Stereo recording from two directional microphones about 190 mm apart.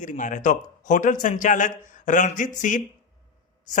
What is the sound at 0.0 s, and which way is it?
A man's voice, 40° left (ahead or behind).